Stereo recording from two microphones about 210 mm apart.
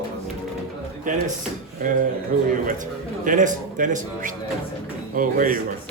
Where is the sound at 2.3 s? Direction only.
40° right (ahead or behind).